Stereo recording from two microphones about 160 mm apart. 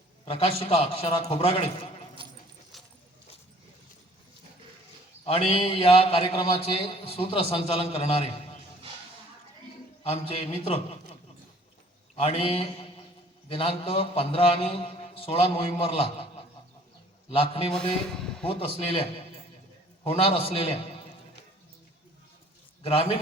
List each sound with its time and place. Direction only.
0.3 s a man's voice: 40° left (ahead or behind)
2.2 s dog: 35° right (ahead or behind)
2.7 s keys jangling: centre (ahead or behind)
5.2 s a man's voice: 40° left (ahead or behind)
10.0 s a man's voice: 40° left (ahead or behind)
12.1 s a man's voice: 40° left (ahead or behind)
17.3 s a man's voice: 35° left (ahead or behind)
17.7 s speech: 5° left (ahead or behind)
18.4 s a man's voice: 40° left (ahead or behind)
20.1 s a man's voice: 40° left (ahead or behind)
22.8 s a man's voice: 35° left (ahead or behind)